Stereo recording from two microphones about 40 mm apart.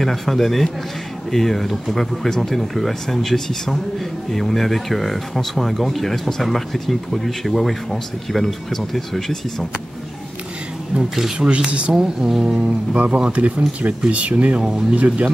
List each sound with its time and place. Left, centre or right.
0.0 s speech: centre
2.2 s speech: centre
11.3 s speech: right
11.9 s speech: centre
12.5 s speech: right
14.6 s speech: centre
15.0 s speech: right